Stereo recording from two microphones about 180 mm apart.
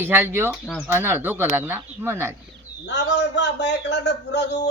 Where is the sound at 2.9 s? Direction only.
70° left (ahead or behind).